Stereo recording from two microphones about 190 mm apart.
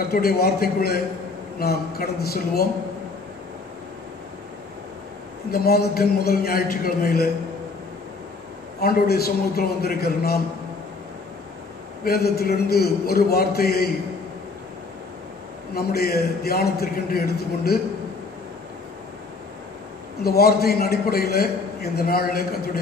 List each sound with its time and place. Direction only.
0.1 s a man's voice: 55° left (ahead or behind)
5.5 s a man's voice: 55° left (ahead or behind)
8.8 s a man's voice: 55° left (ahead or behind)
12.0 s a man's voice: 55° left (ahead or behind)
15.7 s a man's voice: 55° left (ahead or behind)
20.2 s a man's voice: 55° left (ahead or behind)